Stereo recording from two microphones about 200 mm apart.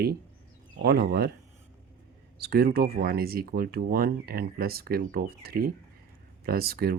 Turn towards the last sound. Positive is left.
turn(degrees=-50)  # may be behind; listen again after turning